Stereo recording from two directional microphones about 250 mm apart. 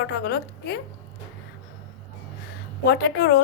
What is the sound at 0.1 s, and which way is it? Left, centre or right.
Speech, left.